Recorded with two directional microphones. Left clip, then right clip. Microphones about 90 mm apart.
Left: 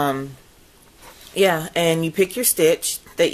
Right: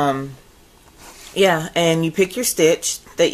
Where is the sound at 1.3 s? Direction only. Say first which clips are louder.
Right 2 dB; 25° left (ahead or behind).